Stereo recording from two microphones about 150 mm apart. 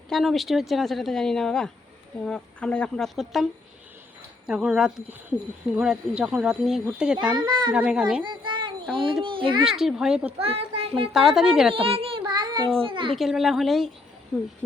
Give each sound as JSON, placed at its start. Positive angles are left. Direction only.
{"t": 0.1, "sound": "speech", "side_deg": 0}
{"t": 4.4, "sound": "speech", "side_deg": -5}
{"t": 7.2, "sound": "a child's voice", "side_deg": -30}
{"t": 7.7, "sound": "speech", "side_deg": -5}
{"t": 8.2, "sound": "a sound", "side_deg": -30}
{"t": 9.2, "sound": "a child's voice", "side_deg": -35}
{"t": 9.6, "sound": "speech", "side_deg": -5}
{"t": 10.3, "sound": "a child's voice", "side_deg": -40}
{"t": 11.1, "sound": "speech", "side_deg": 0}
{"t": 11.7, "sound": "a child's voice", "side_deg": -40}
{"t": 13.1, "sound": "speech", "side_deg": 0}